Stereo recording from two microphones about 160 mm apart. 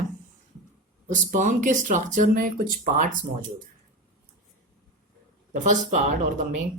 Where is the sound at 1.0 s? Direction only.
50° right (ahead or behind).